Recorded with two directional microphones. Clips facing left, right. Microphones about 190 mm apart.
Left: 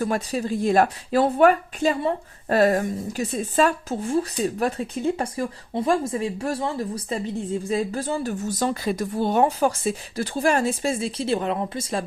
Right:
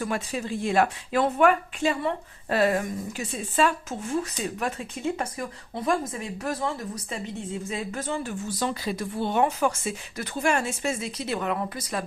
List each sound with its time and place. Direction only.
0.0 s speech: 40° left (ahead or behind)